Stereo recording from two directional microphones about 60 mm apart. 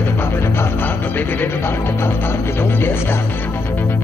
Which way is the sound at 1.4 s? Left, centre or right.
Left.